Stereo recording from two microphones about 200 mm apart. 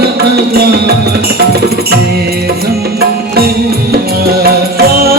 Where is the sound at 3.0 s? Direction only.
50° right (ahead or behind).